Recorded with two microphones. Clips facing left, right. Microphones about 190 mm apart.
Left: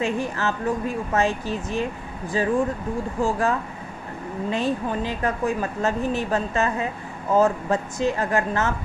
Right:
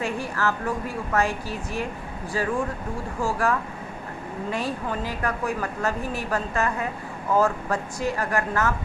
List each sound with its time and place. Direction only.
0.0 s speech: 20° left (ahead or behind)